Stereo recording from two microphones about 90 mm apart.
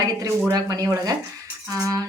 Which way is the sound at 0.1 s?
35° right (ahead or behind).